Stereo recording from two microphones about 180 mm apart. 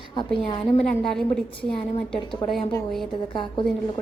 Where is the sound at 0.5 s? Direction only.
5° left (ahead or behind).